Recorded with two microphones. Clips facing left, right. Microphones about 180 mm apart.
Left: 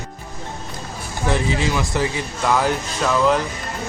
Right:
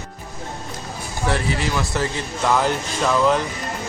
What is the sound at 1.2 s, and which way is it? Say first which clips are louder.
Speech: left 2 dB; 15° left (ahead or behind).